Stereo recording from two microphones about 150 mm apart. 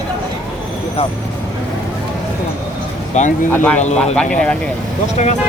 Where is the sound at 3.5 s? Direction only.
10° left (ahead or behind).